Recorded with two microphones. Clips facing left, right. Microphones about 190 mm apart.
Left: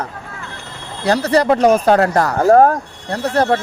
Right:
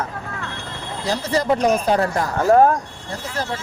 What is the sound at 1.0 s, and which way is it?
Speech, 70° left (ahead or behind).